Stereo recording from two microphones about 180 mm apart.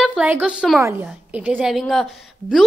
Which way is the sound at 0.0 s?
5° right (ahead or behind).